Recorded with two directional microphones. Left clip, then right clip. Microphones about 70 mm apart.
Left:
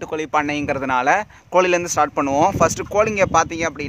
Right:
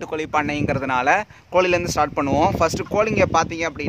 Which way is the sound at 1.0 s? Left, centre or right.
Left.